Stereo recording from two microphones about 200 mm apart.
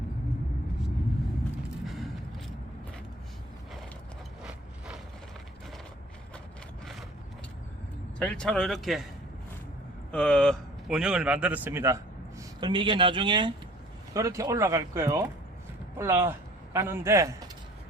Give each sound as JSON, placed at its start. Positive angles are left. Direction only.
{"t": 8.2, "sound": "speech", "side_deg": 5}
{"t": 10.1, "sound": "a man's voice", "side_deg": 5}